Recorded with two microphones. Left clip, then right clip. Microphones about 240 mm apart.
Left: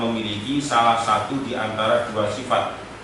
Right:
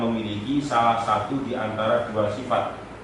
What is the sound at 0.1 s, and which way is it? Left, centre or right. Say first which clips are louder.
A man's voice: left 2 dB; centre.